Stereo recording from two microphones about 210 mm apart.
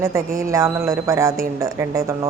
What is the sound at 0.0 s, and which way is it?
Speech, 15° right (ahead or behind).